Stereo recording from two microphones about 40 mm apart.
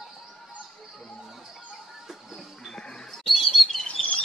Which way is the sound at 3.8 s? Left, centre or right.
Left.